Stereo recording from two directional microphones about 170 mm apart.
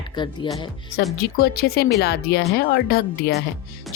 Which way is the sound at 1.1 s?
65° left (ahead or behind).